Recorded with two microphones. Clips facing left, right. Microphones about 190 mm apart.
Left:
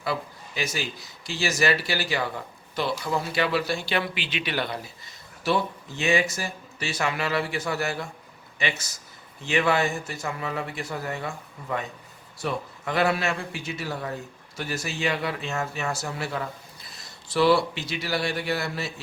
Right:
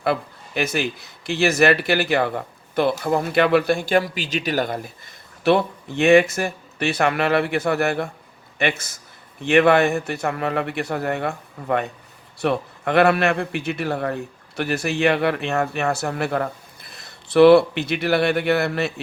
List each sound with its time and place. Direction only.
0.0 s a man's voice: 60° right (ahead or behind)
5.4 s a man's voice: 60° right (ahead or behind)